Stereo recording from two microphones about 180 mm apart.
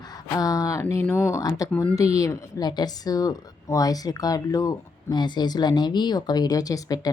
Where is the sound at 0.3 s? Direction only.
20° left (ahead or behind).